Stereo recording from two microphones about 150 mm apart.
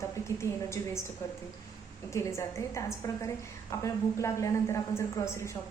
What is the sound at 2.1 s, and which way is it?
A woman's voice, 20° left (ahead or behind).